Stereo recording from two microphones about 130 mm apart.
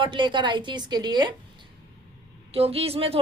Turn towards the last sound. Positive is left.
turn(degrees=-50)  # may be behind; listen again after turning